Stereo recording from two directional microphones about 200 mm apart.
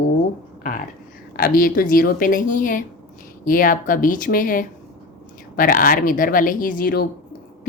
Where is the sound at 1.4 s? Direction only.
45° left (ahead or behind).